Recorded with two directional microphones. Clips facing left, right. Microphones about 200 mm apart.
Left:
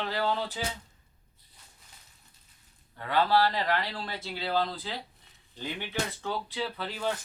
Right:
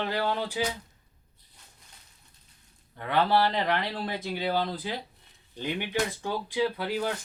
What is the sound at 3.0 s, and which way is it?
Speech, 20° right (ahead or behind).